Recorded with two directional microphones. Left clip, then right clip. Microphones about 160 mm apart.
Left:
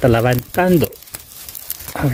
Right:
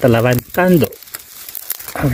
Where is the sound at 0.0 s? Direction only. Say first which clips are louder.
Right 2 dB; centre (ahead or behind).